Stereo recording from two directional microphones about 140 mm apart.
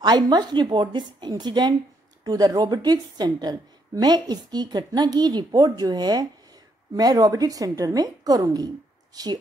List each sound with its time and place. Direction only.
0.0 s a woman's voice: 30° right (ahead or behind)